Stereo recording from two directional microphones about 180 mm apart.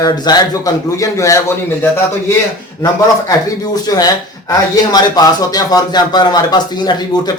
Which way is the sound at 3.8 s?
20° left (ahead or behind).